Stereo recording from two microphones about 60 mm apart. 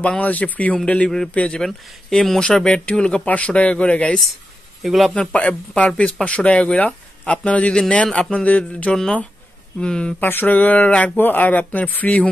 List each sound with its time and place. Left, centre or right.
0.0 s a man's voice: left
1.7 s a man's voice: centre; by 4.2 s left
4.8 s a man's voice: centre
5.3 s a man's voice: left
10.2 s a man's voice: left